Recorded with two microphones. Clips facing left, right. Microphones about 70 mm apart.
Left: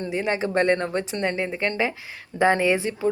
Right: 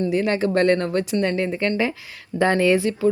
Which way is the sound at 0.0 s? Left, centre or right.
Left.